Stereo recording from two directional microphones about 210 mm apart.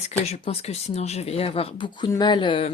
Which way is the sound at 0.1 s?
30° left (ahead or behind).